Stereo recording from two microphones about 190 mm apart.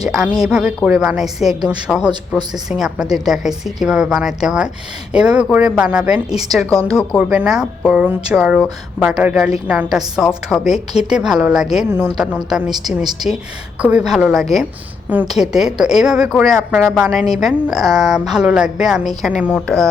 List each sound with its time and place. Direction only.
0.2 s a woman's voice: 5° right (ahead or behind)